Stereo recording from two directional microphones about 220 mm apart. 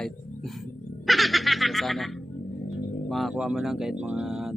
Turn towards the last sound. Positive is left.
turn(degrees=0)  # may be behind; listen again after turning